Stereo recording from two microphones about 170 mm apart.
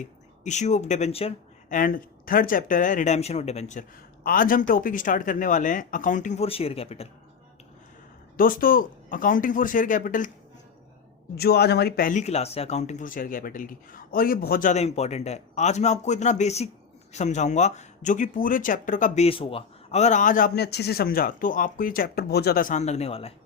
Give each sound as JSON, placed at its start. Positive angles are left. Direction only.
{"t": 0.0, "sound": "speech", "side_deg": 45}
{"t": 1.7, "sound": "speech", "side_deg": 55}
{"t": 4.2, "sound": "speech", "side_deg": 55}
{"t": 8.4, "sound": "speech", "side_deg": 55}
{"t": 11.3, "sound": "speech", "side_deg": 70}